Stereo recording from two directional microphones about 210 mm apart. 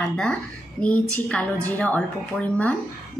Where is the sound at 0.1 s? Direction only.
5° left (ahead or behind).